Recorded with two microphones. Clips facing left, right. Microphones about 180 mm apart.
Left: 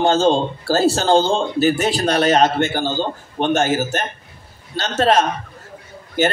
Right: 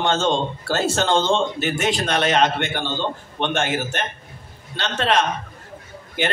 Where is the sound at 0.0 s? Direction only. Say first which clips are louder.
Left 5 dB; 35° left (ahead or behind).